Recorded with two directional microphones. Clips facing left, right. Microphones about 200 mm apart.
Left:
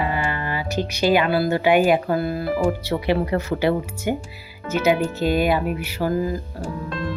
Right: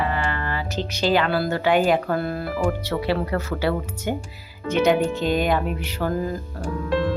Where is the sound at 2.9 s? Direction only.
15° left (ahead or behind).